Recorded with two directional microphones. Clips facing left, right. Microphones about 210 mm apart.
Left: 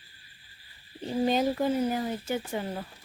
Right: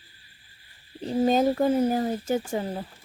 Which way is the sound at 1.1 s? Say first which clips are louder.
Right 4 dB; 45° right (ahead or behind).